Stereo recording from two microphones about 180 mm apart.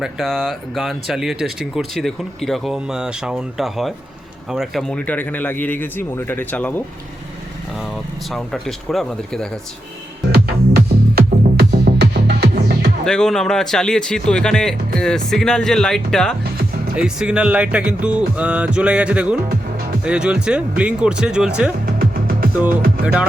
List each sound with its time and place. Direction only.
0.0 s speech: centre (ahead or behind)
8.3 s speech: centre (ahead or behind)
10.3 s music: 60° right (ahead or behind)
13.1 s speech: 5° left (ahead or behind)
16.4 s music: 60° right (ahead or behind)
16.9 s speech: 5° right (ahead or behind)